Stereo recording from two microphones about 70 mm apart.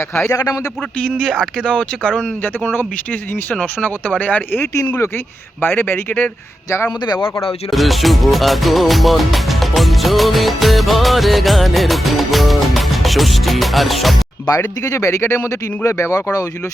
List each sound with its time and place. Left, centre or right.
0.1 s speech: left
0.3 s a man's voice: left
1.2 s speech: centre
3.8 s speech: left
4.6 s speech: left
5.5 s speech: left
7.7 s music: centre
14.4 s speech: left